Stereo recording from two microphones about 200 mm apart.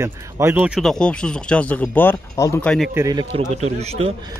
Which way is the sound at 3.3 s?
30° right (ahead or behind).